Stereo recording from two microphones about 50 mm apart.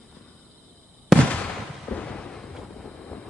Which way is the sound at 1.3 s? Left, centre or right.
Left.